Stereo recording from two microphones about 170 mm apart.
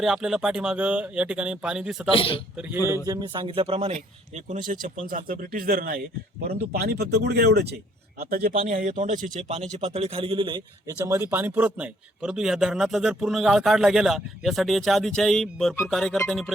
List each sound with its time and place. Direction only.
0.0 s a man's voice: 5° right (ahead or behind)
2.1 s a man's voice: 30° left (ahead or behind)
2.6 s speech: 10° right (ahead or behind)
3.1 s speech: 25° right (ahead or behind); by 7.8 s 75° right (ahead or behind)
8.2 s a man's voice: 60° right (ahead or behind)
8.5 s a man's voice: 50° right (ahead or behind); by 16.5 s 5° left (ahead or behind)